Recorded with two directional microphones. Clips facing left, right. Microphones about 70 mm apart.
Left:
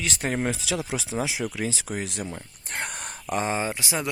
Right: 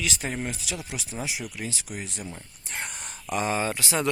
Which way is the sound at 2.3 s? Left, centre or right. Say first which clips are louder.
Left 3 dB; left.